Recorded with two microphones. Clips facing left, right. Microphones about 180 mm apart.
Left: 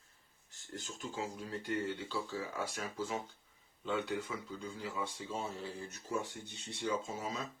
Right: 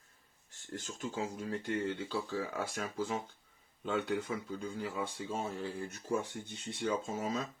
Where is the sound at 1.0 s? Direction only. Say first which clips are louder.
Right 4 dB; 50° right (ahead or behind).